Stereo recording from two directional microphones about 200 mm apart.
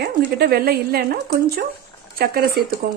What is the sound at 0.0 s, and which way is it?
Speech, 50° right (ahead or behind).